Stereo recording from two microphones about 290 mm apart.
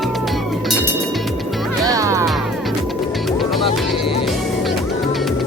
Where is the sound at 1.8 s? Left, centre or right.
Centre.